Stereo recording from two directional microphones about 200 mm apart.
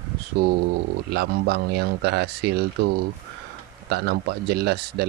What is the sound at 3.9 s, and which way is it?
A man's voice, 55° right (ahead or behind).